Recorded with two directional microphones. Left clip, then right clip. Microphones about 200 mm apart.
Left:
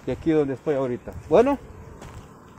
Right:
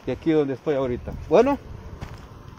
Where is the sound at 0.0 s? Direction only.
5° right (ahead or behind).